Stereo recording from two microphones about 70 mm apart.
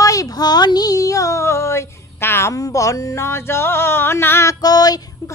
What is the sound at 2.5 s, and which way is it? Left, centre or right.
Music, left.